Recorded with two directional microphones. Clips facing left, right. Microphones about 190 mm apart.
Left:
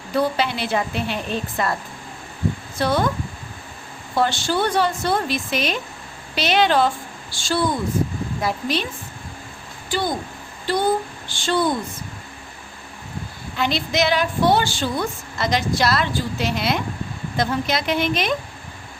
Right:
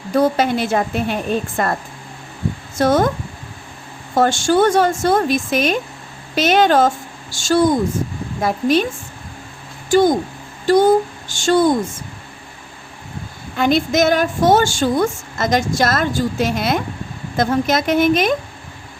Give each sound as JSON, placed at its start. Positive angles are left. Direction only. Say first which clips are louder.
{"t": 0.1, "sound": "a woman's voice", "louder": "right 6 dB", "side_deg": -45}
{"t": 2.7, "sound": "a woman's voice", "louder": "right 7 dB", "side_deg": -45}
{"t": 4.1, "sound": "a woman's voice", "louder": "right 6 dB", "side_deg": -45}
{"t": 9.9, "sound": "a woman's voice", "louder": "right 11 dB", "side_deg": -45}
{"t": 13.6, "sound": "a woman's voice", "louder": "right 6 dB", "side_deg": -50}